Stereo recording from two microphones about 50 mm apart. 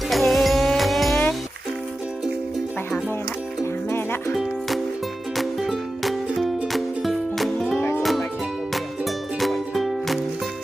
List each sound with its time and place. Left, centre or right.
0.1 s music: centre
3.8 s music: left
5.4 s music: centre
7.8 s music: left
8.7 s music: centre